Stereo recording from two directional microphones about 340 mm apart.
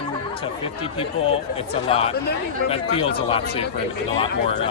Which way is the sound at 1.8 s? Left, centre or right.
Centre.